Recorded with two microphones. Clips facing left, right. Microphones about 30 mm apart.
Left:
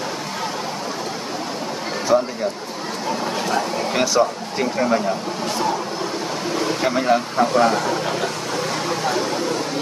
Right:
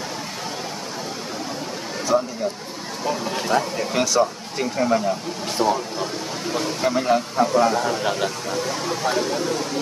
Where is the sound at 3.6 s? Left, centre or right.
Left.